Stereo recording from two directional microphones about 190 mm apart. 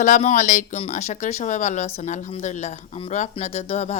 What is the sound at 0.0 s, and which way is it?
Speech, 40° left (ahead or behind).